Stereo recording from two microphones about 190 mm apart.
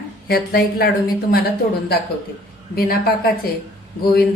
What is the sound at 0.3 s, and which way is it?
Speech, 55° left (ahead or behind).